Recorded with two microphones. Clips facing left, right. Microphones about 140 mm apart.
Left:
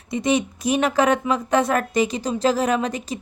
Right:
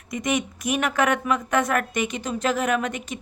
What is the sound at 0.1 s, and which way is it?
Speech, 30° left (ahead or behind).